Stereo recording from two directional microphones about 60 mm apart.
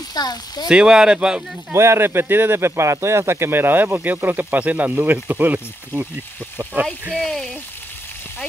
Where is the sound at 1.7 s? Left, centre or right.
Right.